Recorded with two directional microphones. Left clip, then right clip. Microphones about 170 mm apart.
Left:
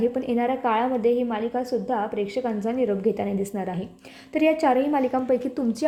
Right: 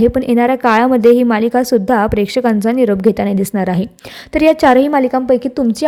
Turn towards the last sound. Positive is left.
turn(degrees=-25)  # may be behind; listen again after turning